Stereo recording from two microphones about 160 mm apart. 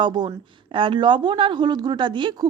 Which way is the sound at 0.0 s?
30° right (ahead or behind).